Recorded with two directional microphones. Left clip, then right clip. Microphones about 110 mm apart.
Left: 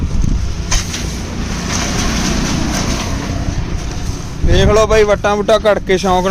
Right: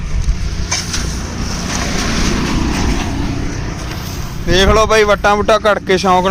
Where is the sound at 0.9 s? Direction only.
20° right (ahead or behind).